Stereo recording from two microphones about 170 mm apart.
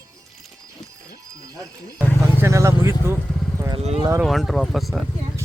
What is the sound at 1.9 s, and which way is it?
Vehicle, 15° right (ahead or behind).